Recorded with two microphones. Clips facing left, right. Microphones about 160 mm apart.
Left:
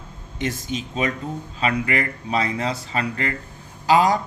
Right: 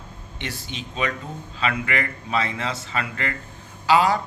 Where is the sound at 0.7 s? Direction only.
5° left (ahead or behind).